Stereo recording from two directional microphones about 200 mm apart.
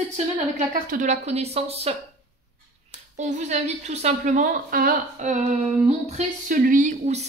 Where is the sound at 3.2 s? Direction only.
35° right (ahead or behind).